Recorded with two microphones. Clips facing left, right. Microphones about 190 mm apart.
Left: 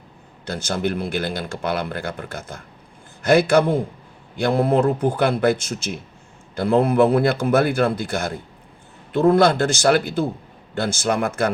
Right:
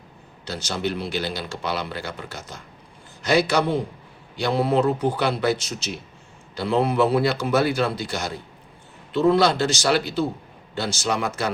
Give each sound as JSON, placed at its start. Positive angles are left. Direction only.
{"t": 0.4, "sound": "speech", "side_deg": 50}